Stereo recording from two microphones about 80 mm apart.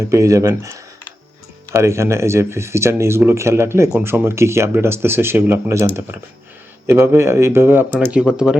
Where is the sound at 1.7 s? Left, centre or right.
Right.